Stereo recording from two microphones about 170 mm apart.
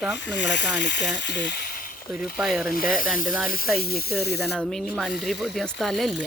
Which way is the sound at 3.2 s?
Centre (ahead or behind).